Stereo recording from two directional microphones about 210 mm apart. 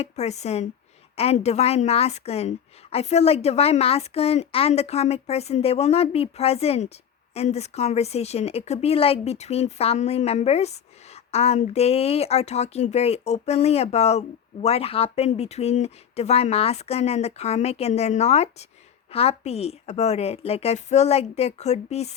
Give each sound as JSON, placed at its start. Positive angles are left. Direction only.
{"t": 0.0, "sound": "a woman's voice", "side_deg": 30}